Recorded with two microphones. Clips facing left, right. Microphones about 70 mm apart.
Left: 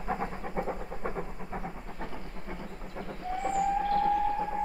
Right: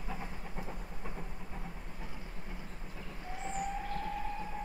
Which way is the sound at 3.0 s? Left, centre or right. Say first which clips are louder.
Left 11 dB; left.